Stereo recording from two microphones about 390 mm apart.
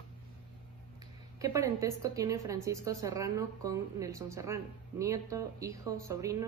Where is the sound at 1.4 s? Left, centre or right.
Centre.